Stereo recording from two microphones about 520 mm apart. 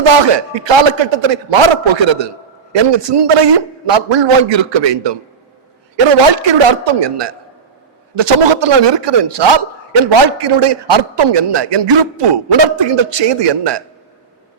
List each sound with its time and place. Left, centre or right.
0.0 s a man's voice: right